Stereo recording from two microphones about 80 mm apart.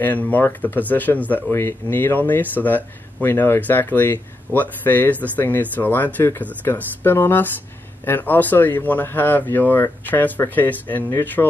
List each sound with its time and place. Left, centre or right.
0.0 s speech: left